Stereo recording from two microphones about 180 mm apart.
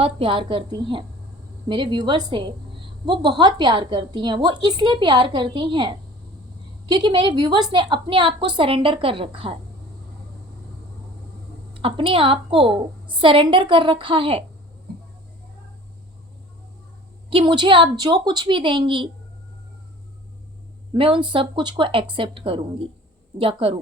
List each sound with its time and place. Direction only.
0.0 s a woman's voice: 30° right (ahead or behind)
11.7 s a woman's voice: 30° right (ahead or behind)
17.2 s a woman's voice: 30° right (ahead or behind)
20.9 s a woman's voice: 30° right (ahead or behind)